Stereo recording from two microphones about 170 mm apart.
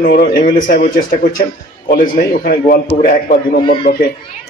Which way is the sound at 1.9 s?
55° left (ahead or behind).